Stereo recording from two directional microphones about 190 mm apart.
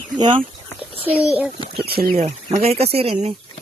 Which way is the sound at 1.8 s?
50° right (ahead or behind).